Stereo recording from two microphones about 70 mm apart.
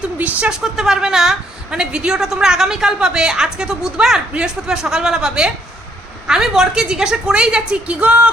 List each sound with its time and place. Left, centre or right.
0.2 s speech: right
0.6 s a woman's voice: centre